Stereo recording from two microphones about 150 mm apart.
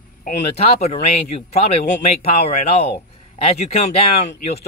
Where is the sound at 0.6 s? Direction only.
40° left (ahead or behind).